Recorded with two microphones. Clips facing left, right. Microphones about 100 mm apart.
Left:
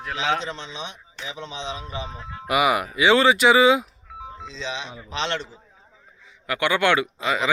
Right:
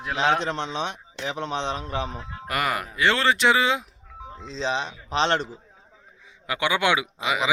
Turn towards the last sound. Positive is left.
turn(degrees=-10)  # may be behind; listen again after turning